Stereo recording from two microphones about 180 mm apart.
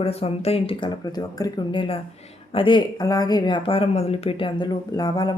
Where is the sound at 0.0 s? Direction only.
35° left (ahead or behind).